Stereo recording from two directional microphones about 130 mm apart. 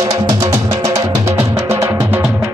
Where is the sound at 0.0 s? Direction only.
25° right (ahead or behind).